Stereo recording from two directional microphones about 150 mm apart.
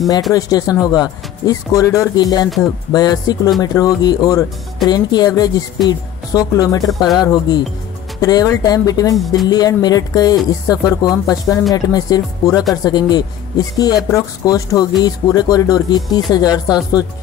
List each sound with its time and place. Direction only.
0.3 s speech: 25° left (ahead or behind)